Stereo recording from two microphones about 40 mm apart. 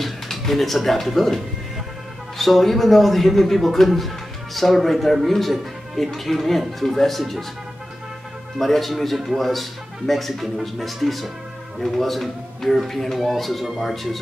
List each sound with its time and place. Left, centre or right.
0.0 s speech: centre
8.5 s speech: centre